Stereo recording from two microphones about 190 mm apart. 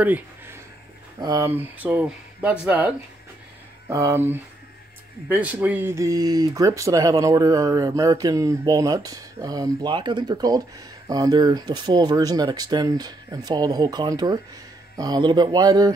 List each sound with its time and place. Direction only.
0.0 s speech: 10° right (ahead or behind)